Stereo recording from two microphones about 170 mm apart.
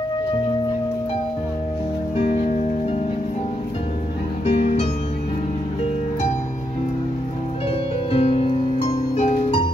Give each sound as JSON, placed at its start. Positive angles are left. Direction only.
{"t": 4.6, "sound": "music", "side_deg": 40}
{"t": 8.1, "sound": "music", "side_deg": 35}